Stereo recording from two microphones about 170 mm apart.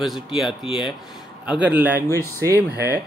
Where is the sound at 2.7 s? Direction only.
70° right (ahead or behind).